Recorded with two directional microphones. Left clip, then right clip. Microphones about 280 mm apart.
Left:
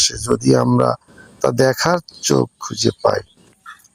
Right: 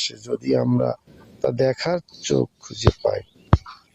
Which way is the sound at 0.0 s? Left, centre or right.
Centre.